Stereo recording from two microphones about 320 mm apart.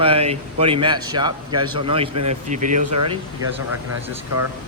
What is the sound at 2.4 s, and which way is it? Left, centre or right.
Speech, right.